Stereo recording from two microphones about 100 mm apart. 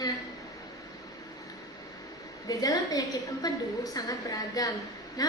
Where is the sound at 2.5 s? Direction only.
40° left (ahead or behind).